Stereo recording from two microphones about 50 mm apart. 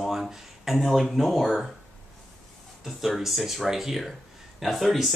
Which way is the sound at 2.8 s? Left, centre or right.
Centre.